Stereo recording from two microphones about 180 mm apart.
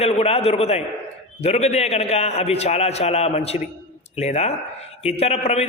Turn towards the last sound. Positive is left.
turn(degrees=35)  # may be behind; listen again after turning